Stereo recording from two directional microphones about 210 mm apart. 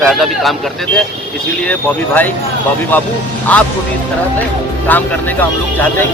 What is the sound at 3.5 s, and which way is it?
Speech, 5° left (ahead or behind).